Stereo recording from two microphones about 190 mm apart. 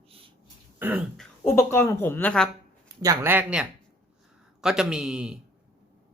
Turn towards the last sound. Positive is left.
turn(degrees=-5)  # may be behind; listen again after turning